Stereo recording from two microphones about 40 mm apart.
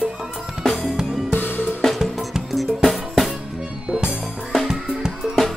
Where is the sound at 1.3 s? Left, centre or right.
Left.